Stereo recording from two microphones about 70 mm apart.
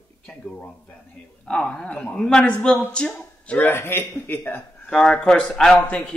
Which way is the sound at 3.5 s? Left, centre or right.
Left.